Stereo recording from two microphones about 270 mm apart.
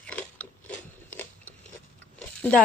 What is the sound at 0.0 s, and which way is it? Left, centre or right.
Biting, centre.